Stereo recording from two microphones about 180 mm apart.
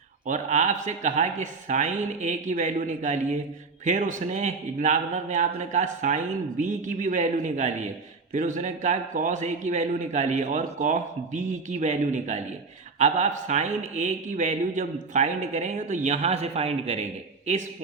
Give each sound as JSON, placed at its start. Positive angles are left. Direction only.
{"t": 0.3, "sound": "a man's voice", "side_deg": -40}